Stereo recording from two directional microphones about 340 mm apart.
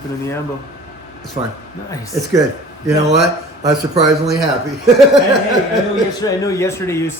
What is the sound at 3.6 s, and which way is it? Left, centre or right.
Speech, centre.